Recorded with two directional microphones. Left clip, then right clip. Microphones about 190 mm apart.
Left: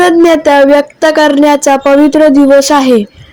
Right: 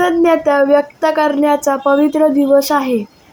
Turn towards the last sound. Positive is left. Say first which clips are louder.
# left 7 dB
turn(degrees=40)  # may be behind; listen again after turning